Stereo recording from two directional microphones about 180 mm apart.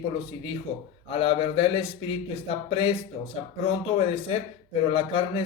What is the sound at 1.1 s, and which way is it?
Speech, 30° left (ahead or behind).